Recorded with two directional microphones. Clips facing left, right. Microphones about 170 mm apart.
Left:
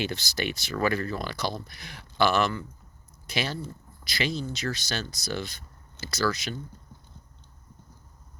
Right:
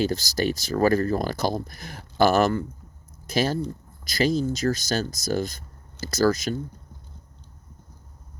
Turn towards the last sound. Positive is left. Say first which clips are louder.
# right 7 dB
turn(degrees=-45)  # may be behind; listen again after turning